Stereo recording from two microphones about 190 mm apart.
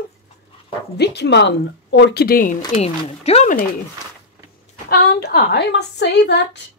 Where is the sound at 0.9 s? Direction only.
60° left (ahead or behind); by 2.6 s 45° left (ahead or behind).